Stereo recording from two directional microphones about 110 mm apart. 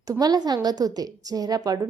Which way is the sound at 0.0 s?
35° right (ahead or behind).